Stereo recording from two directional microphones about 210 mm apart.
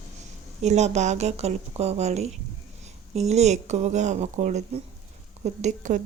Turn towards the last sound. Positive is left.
turn(degrees=-35)  # may be behind; listen again after turning